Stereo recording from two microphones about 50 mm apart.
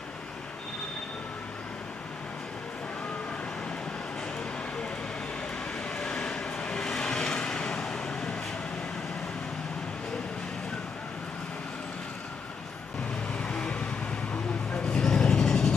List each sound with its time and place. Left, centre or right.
6.0 s vehicle: centre
13.4 s vehicle: left